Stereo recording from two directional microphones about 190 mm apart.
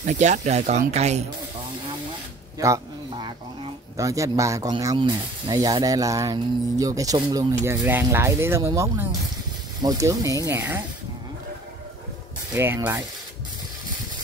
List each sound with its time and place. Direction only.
0.0 s speech: 40° right (ahead or behind)
2.6 s speech: 20° right (ahead or behind)
12.5 s speech: 15° right (ahead or behind)